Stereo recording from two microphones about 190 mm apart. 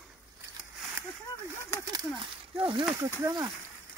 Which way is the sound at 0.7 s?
10° right (ahead or behind).